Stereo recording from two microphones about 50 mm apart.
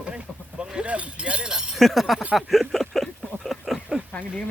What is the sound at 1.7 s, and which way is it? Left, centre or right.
Speech, centre.